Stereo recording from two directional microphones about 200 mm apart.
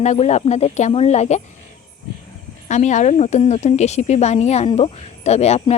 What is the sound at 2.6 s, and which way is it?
Speech, 35° left (ahead or behind).